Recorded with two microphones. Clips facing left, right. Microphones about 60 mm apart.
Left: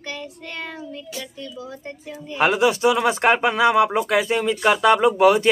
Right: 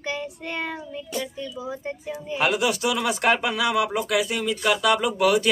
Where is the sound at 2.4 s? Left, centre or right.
Left.